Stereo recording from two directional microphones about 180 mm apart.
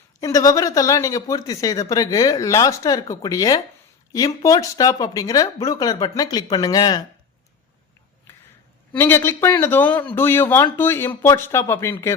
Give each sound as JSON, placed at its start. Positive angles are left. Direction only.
{"t": 0.2, "sound": "speech", "side_deg": 20}
{"t": 9.0, "sound": "speech", "side_deg": 10}